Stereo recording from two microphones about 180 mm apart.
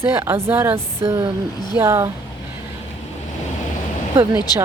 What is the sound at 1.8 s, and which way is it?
Speech, 15° right (ahead or behind).